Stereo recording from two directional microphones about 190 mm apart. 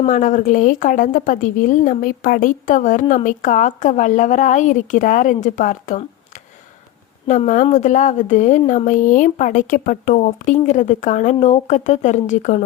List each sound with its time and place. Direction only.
0.0 s a woman's voice: 40° left (ahead or behind)
7.3 s a woman's voice: 40° left (ahead or behind)